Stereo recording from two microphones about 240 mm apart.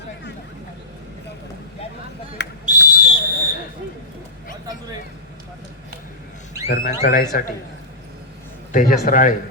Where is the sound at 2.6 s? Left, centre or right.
Right.